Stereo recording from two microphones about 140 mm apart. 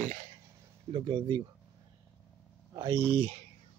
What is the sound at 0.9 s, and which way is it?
Speech, 35° right (ahead or behind).